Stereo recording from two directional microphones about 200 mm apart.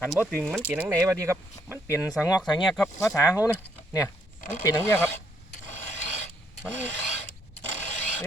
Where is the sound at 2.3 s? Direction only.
20° left (ahead or behind).